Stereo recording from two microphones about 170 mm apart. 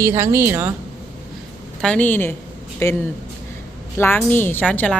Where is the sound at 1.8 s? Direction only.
10° left (ahead or behind).